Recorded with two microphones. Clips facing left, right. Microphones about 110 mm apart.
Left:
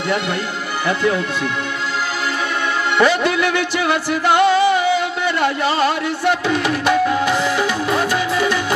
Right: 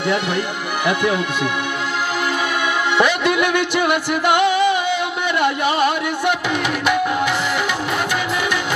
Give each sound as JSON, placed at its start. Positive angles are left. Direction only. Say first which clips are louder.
{"t": 3.0, "sound": "music", "louder": "left 2 dB", "side_deg": -15}